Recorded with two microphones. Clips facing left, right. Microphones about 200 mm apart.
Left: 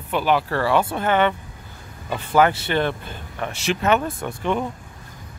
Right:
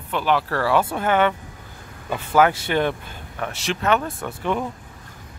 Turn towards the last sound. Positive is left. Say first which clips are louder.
# left 1 dB
turn(degrees=-5)  # may be behind; listen again after turning